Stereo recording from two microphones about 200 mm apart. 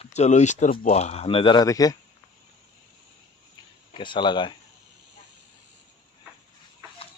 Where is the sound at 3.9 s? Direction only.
25° left (ahead or behind).